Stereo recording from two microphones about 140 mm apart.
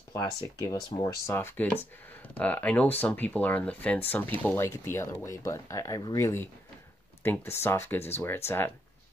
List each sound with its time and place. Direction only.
0.1 s speech: 25° left (ahead or behind)